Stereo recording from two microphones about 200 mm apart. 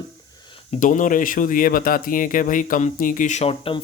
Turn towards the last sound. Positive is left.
turn(degrees=30)  # may be behind; listen again after turning